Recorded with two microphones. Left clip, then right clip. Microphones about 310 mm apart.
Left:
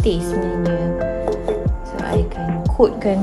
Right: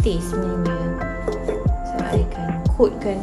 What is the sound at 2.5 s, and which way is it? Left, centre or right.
Music, centre.